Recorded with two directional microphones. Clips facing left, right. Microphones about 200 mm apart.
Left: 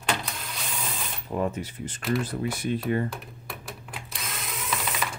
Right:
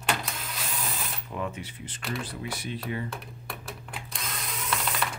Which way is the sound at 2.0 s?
Centre (ahead or behind).